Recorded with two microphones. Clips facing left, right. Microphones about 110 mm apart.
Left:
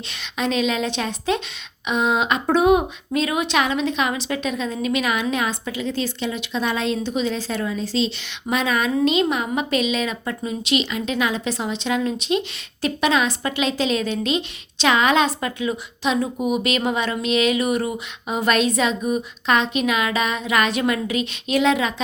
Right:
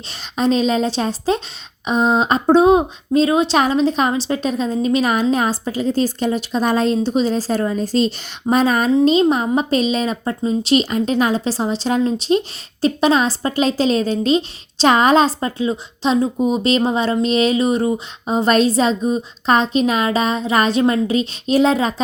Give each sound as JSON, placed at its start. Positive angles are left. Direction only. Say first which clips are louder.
{"t": 0.3, "sound": "a woman's voice", "louder": "right 5 dB", "side_deg": -35}